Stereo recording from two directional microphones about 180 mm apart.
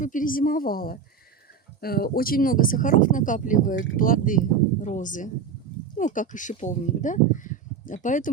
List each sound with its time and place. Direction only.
0.0 s speech: 45° left (ahead or behind)